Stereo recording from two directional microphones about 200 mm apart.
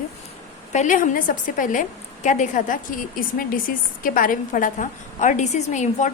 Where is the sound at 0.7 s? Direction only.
40° left (ahead or behind).